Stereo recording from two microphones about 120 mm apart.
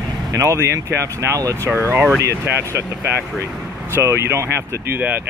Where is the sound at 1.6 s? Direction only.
15° left (ahead or behind).